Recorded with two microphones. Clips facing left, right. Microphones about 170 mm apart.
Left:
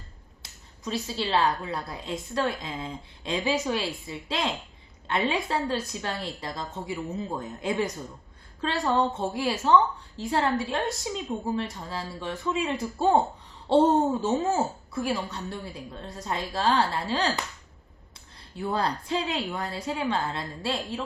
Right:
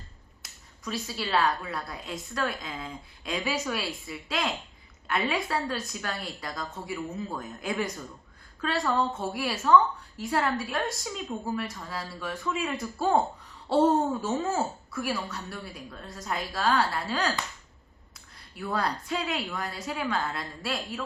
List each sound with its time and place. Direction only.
0.4 s a woman's voice: 25° left (ahead or behind)
18.5 s a woman's voice: 25° left (ahead or behind)